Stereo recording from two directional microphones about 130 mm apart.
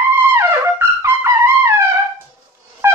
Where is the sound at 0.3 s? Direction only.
20° right (ahead or behind).